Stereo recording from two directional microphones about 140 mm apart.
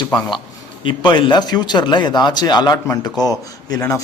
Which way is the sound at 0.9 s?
35° left (ahead or behind).